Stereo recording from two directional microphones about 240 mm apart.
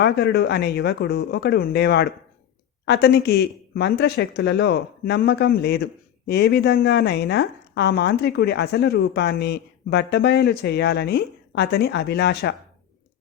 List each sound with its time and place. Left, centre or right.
0.0 s speech: left